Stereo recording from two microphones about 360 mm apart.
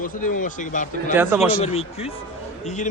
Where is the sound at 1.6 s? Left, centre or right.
Centre.